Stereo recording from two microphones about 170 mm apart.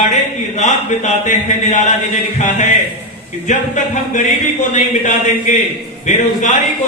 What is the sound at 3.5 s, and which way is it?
Speech, 45° left (ahead or behind).